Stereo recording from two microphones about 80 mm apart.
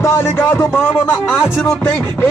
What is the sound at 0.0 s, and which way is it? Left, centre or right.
Speech, left.